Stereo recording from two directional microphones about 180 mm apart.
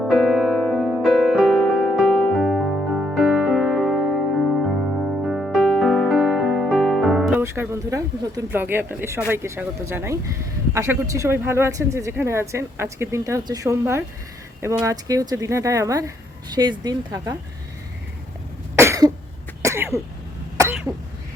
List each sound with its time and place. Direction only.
0.0 s music: centre (ahead or behind)
7.4 s a woman's voice: 15° right (ahead or behind)
18.8 s cough: 15° right (ahead or behind)